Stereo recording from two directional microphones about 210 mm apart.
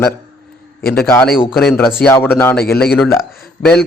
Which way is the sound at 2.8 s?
Centre (ahead or behind).